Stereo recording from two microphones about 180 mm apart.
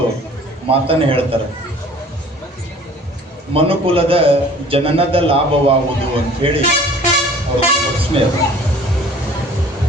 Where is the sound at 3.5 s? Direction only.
30° right (ahead or behind).